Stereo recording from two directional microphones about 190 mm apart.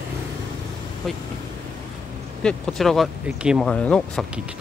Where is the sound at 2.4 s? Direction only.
5° left (ahead or behind).